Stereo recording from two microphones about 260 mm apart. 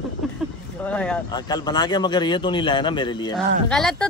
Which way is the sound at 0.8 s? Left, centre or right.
Centre.